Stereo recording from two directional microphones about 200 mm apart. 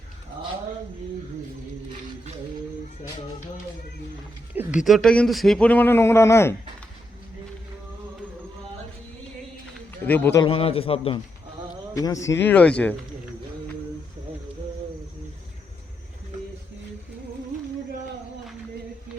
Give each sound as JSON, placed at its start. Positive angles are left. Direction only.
{"t": 4.5, "sound": "speech", "side_deg": -5}
{"t": 10.0, "sound": "a man's voice", "side_deg": 10}
{"t": 10.4, "sound": "a man's voice", "side_deg": 25}
{"t": 11.9, "sound": "a man's voice", "side_deg": 15}